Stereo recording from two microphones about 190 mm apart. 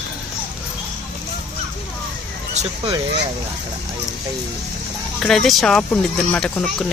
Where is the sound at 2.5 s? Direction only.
35° right (ahead or behind).